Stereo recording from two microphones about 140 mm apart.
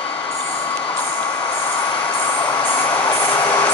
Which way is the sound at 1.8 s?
30° left (ahead or behind).